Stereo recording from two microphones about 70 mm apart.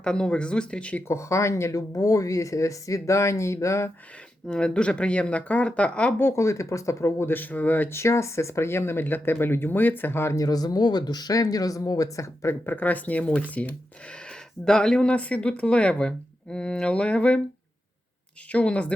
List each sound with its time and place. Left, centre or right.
0.0 s speech: centre
1.0 s speech: left
4.4 s speech: centre
6.1 s speech: left
7.9 s speech: left
10.3 s speech: left
12.6 s speech: left
18.5 s speech: centre